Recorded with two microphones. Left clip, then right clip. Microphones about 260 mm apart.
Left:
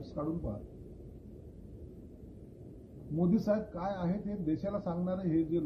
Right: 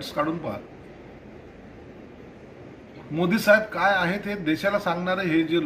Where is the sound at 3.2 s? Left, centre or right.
Centre.